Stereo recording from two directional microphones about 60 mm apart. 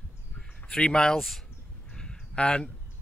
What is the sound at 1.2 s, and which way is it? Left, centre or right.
Speech, centre.